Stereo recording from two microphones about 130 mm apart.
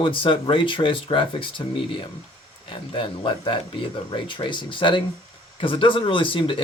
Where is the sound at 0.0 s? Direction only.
40° left (ahead or behind).